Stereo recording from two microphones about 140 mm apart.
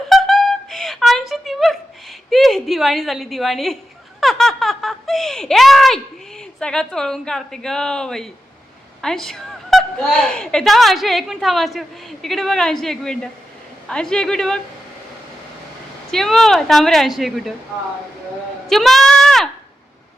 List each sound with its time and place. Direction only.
0.1 s music: centre (ahead or behind)
2.3 s a woman's voice: centre (ahead or behind)
16.1 s a woman's voice: centre (ahead or behind)
18.7 s speech: centre (ahead or behind)